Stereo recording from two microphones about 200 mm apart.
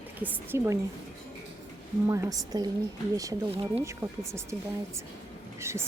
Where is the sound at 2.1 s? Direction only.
15° right (ahead or behind).